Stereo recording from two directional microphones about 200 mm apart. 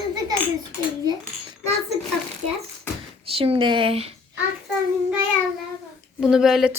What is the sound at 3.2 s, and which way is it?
Speech, 30° right (ahead or behind).